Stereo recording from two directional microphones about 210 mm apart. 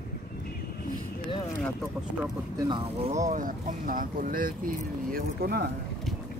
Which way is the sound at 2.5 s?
20° right (ahead or behind).